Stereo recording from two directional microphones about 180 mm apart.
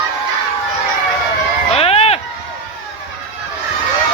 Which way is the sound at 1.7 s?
35° left (ahead or behind).